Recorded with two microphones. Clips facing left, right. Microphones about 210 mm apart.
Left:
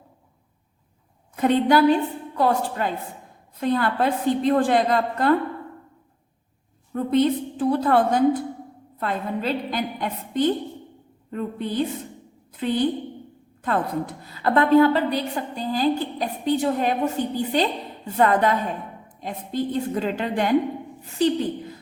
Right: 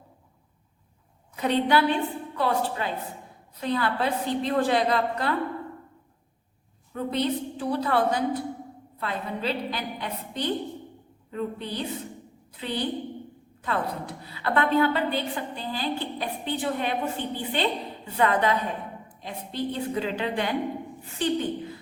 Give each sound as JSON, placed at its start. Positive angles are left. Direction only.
{"t": 1.4, "sound": "a woman's voice", "side_deg": 50}
{"t": 6.9, "sound": "a woman's voice", "side_deg": 50}